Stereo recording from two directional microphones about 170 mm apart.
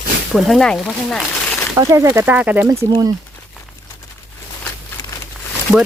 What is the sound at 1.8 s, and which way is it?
Speech, 15° right (ahead or behind).